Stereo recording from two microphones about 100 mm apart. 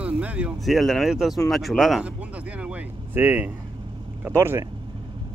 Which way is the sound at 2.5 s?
15° right (ahead or behind).